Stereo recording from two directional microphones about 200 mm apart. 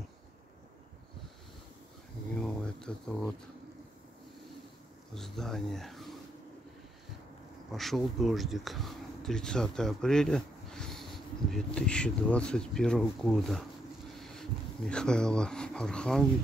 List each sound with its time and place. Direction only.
2.3 s a sound: 5° left (ahead or behind)
5.1 s speech: centre (ahead or behind)
7.7 s speech: centre (ahead or behind)